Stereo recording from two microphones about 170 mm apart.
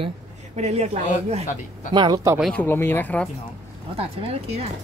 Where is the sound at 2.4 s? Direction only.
5° left (ahead or behind).